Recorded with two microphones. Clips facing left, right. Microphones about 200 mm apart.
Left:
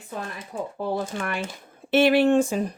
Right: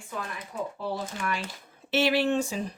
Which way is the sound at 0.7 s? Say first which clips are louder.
Left 6 dB; 50° left (ahead or behind).